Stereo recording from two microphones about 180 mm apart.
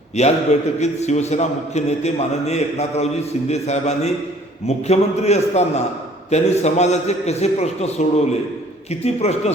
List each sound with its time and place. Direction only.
0.2 s a man's voice: 35° left (ahead or behind)